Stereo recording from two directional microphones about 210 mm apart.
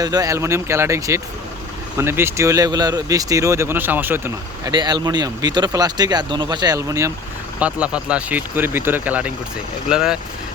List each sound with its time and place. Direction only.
0.0 s speech: 15° right (ahead or behind)